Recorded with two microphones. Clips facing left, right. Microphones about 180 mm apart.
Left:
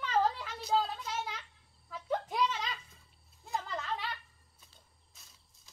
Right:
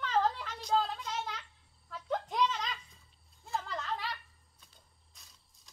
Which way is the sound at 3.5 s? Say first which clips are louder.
Even; 5° left (ahead or behind).